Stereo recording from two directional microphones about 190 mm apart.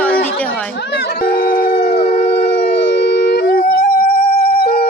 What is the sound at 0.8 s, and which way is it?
Howl, 60° left (ahead or behind).